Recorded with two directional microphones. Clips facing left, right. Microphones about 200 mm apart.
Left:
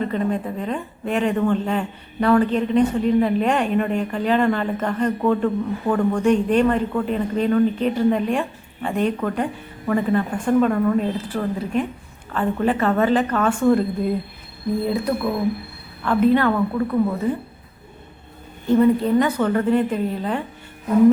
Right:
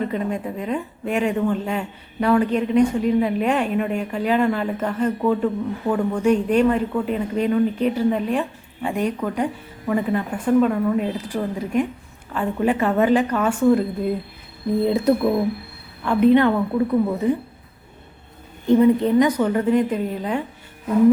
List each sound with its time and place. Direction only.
0.0 s speech: 10° right (ahead or behind)
14.8 s a woman's voice: 25° right (ahead or behind)
18.6 s speech: 15° right (ahead or behind)